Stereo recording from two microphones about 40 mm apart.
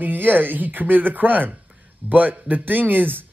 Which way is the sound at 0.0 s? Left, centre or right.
Right.